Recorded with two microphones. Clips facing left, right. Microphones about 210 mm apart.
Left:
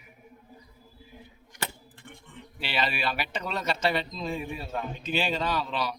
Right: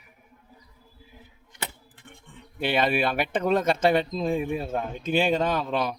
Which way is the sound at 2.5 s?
50° right (ahead or behind).